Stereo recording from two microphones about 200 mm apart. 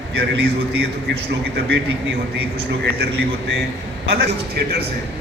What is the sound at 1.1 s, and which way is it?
Speech, 55° right (ahead or behind).